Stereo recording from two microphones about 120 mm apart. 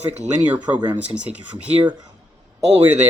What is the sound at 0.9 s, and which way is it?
Speech, 10° right (ahead or behind).